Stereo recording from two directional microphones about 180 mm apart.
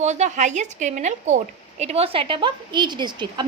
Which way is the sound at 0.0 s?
40° right (ahead or behind).